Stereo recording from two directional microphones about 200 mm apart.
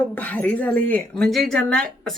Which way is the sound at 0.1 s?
5° left (ahead or behind).